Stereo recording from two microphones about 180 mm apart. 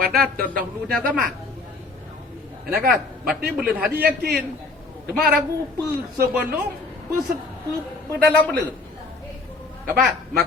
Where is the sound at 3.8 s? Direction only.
60° right (ahead or behind).